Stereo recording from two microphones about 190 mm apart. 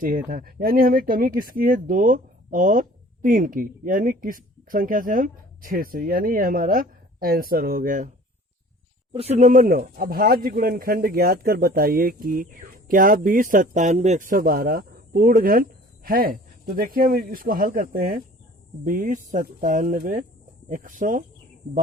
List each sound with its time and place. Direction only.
0.0 s a man's voice: 45° right (ahead or behind)
9.1 s a man's voice: 35° right (ahead or behind)